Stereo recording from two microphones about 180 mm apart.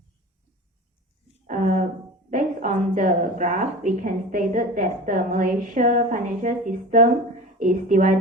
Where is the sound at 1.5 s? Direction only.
45° right (ahead or behind).